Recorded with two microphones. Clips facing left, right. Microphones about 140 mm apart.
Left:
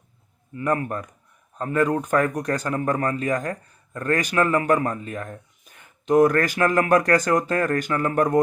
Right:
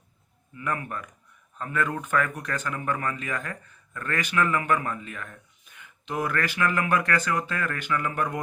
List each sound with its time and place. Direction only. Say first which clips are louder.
0.5 s speech: left 7 dB; 35° left (ahead or behind)